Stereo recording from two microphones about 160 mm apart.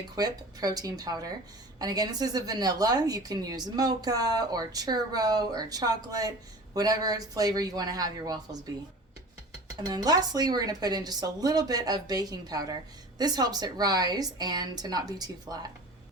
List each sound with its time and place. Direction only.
0.2 s a woman's voice: 25° right (ahead or behind)
9.8 s a woman's voice: 25° right (ahead or behind)